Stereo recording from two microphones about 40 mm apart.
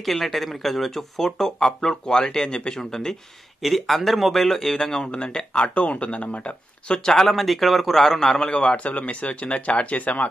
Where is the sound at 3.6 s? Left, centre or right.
Centre.